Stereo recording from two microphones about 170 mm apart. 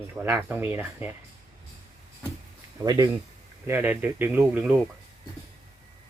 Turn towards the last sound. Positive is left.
turn(degrees=-10)  # may be behind; listen again after turning